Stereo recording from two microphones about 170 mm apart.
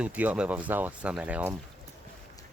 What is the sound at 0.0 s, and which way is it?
Speech, 10° right (ahead or behind).